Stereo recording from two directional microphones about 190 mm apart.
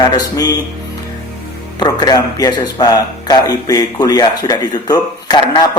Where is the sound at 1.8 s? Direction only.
20° left (ahead or behind).